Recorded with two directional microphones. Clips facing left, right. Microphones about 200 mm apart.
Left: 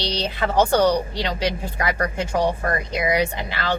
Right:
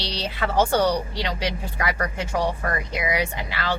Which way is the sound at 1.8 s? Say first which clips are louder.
Left 3 dB; 35° left (ahead or behind).